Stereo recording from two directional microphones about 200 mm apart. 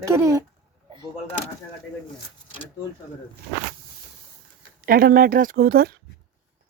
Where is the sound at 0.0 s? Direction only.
15° right (ahead or behind).